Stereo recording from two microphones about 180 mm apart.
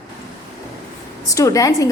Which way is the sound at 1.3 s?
20° left (ahead or behind).